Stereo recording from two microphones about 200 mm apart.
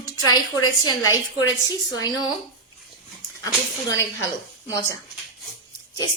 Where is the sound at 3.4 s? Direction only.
15° left (ahead or behind).